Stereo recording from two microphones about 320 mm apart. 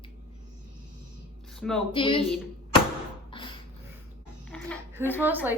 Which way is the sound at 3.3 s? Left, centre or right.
Centre.